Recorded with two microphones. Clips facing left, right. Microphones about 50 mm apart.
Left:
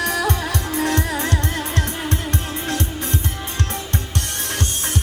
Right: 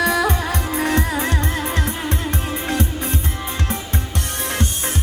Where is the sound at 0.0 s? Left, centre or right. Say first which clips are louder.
Right 3 dB; right.